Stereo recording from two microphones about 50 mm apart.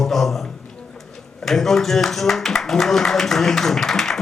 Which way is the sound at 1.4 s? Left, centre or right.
Centre.